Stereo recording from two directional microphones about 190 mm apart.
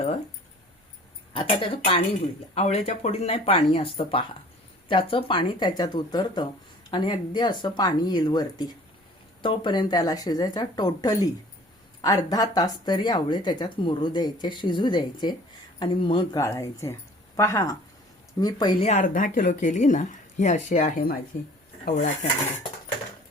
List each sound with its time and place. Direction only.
1.3 s a woman's voice: 25° left (ahead or behind)
18.9 s speech: 40° left (ahead or behind)